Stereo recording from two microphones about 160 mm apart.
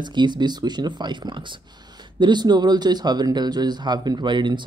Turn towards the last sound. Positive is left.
turn(degrees=-30)  # may be behind; listen again after turning